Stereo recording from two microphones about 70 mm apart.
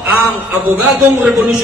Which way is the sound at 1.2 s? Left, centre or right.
Centre.